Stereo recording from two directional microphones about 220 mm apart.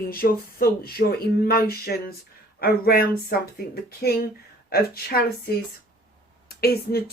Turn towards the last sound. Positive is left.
turn(degrees=45)  # may be behind; listen again after turning